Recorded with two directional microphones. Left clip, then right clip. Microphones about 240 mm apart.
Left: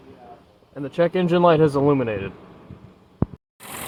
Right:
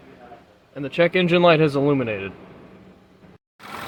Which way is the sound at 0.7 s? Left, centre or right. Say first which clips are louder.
Right 2 dB; right.